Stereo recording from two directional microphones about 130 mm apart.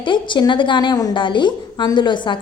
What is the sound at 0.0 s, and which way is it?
A woman's voice, 40° left (ahead or behind).